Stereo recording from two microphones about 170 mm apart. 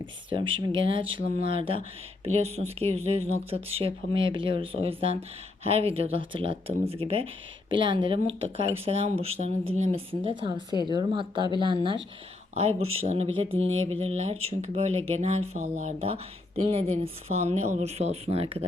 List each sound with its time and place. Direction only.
0.0 s speech: 30° right (ahead or behind)